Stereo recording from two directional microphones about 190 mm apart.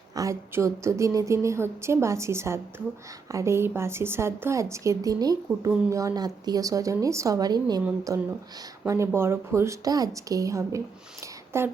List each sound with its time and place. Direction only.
0.2 s a woman's voice: 15° right (ahead or behind)